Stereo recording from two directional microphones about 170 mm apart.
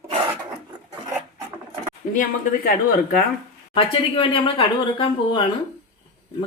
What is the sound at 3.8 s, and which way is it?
Speech, 30° left (ahead or behind).